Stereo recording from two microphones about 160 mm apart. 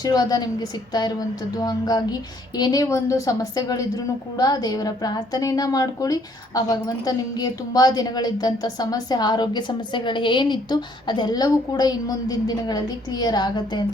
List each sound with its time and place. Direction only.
0.0 s a woman's voice: 25° left (ahead or behind)